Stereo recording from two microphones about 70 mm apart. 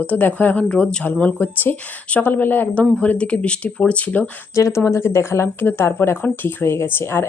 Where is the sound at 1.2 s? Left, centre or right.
Left.